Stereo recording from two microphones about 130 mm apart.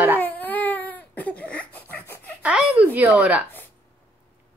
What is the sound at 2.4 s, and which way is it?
Speech, 10° right (ahead or behind).